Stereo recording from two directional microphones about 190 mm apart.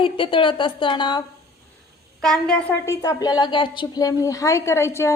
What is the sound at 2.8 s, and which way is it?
A woman's voice, 15° left (ahead or behind).